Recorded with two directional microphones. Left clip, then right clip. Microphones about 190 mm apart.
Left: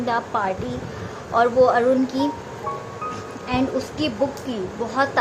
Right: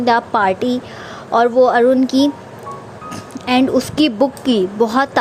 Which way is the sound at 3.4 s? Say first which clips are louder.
Right 9 dB; 45° right (ahead or behind).